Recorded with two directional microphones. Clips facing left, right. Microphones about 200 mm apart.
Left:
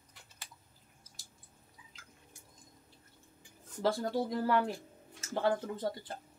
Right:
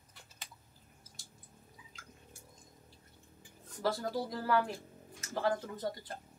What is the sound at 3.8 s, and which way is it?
Speech, 25° left (ahead or behind).